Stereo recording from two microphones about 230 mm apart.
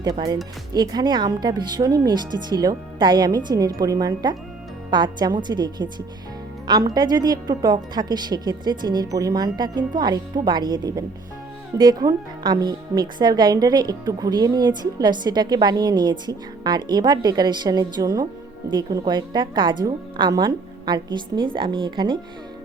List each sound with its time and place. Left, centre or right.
0.7 s a woman's voice: centre